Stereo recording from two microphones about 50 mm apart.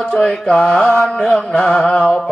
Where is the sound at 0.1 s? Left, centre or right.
Centre.